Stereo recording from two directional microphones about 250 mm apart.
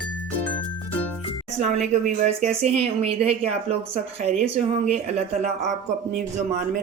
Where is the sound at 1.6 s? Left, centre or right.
Right.